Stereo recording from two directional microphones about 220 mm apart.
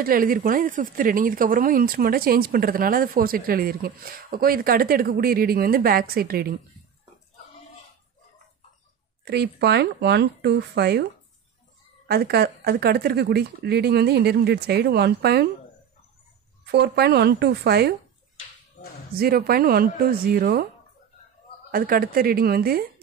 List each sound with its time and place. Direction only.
0.0 s speech: 40° right (ahead or behind)
9.2 s speech: 50° right (ahead or behind)
12.1 s speech: 45° right (ahead or behind)
16.7 s speech: 50° right (ahead or behind)
19.1 s speech: 45° right (ahead or behind)
21.6 s speech: 40° right (ahead or behind)